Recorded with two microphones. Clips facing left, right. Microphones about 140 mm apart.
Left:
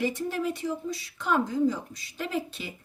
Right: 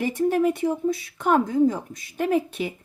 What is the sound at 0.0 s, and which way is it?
Speech, 50° right (ahead or behind).